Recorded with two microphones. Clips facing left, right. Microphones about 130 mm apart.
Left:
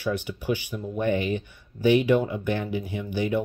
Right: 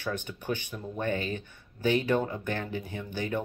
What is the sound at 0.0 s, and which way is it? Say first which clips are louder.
Speech: left 6 dB; 10° left (ahead or behind).